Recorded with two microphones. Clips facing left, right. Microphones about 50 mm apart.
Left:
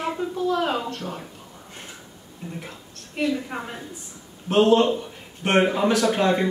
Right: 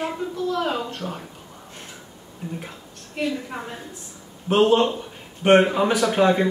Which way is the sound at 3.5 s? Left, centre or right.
Centre.